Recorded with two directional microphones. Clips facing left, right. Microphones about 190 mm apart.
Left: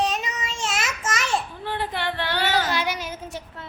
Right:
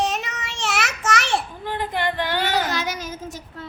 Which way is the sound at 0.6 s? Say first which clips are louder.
Right 4 dB; 70° right (ahead or behind).